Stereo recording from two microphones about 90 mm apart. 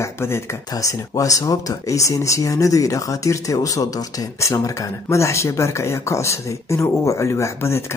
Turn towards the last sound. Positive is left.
turn(degrees=30)  # may be behind; listen again after turning